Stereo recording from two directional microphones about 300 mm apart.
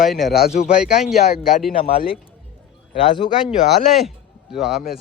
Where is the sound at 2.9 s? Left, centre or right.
Centre.